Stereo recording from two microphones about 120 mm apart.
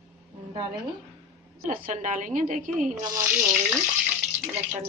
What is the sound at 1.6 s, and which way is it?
A woman's voice, 90° right.